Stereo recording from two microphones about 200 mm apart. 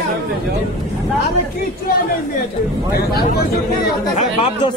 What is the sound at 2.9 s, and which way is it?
Speech, 50° left (ahead or behind).